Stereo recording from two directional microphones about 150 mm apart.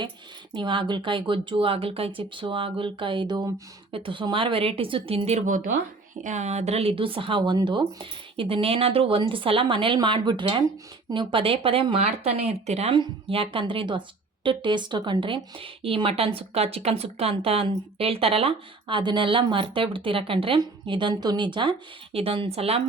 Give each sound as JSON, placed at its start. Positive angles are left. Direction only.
{"t": 0.5, "sound": "speech", "side_deg": -30}